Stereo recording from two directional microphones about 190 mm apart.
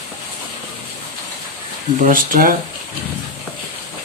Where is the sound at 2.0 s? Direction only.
45° right (ahead or behind).